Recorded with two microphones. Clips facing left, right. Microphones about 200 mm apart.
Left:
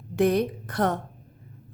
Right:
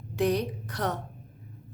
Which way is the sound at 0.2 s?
55° left (ahead or behind).